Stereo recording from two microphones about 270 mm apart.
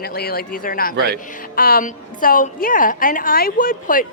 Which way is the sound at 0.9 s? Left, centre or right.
Right.